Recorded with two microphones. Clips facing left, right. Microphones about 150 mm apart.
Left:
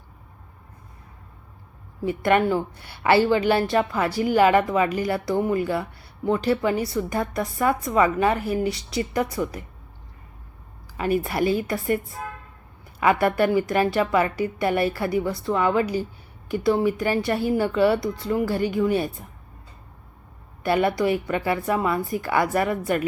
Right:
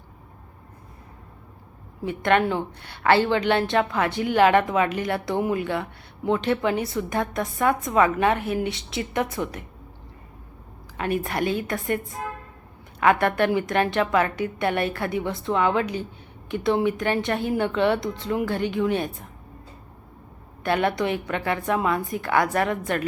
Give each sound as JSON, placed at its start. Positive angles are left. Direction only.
{"t": 2.0, "sound": "a woman's voice", "side_deg": 5}
{"t": 10.9, "sound": "a woman's voice", "side_deg": 5}
{"t": 20.7, "sound": "a woman's voice", "side_deg": 5}